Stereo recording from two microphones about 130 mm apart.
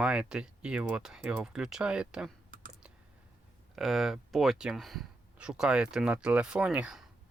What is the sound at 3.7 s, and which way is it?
Speech, centre (ahead or behind).